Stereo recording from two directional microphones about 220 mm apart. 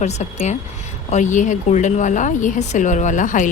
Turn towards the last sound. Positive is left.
turn(degrees=35)  # may be behind; listen again after turning